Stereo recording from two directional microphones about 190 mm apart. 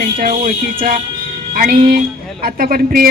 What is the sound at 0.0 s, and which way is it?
A woman's voice, 50° right (ahead or behind).